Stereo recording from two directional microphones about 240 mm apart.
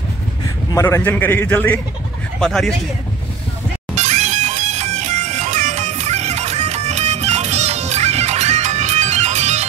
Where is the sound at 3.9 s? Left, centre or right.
Right.